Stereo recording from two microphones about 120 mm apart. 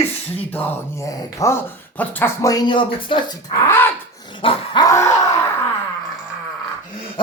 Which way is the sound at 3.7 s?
15° left (ahead or behind).